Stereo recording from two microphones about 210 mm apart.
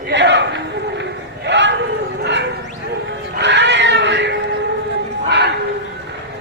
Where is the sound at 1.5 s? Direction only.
60° right (ahead or behind).